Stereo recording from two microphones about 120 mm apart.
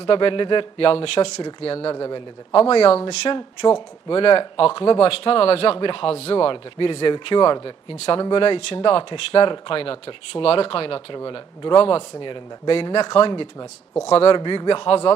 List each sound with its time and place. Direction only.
0.0 s speech: 50° left (ahead or behind)
2.0 s a man's voice: 30° left (ahead or behind)
2.5 s a man's voice: 55° left (ahead or behind)
14.3 s speech: 40° left (ahead or behind)